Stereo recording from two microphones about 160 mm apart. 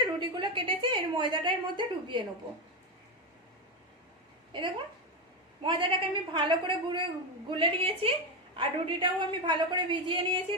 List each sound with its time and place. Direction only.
0.0 s a woman's voice: 30° right (ahead or behind)
5.6 s a woman's voice: 30° right (ahead or behind)